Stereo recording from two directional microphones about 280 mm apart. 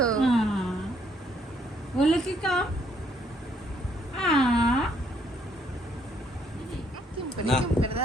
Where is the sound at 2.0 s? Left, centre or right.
Centre.